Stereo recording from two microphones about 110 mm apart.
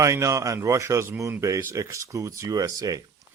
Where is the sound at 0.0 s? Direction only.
25° right (ahead or behind).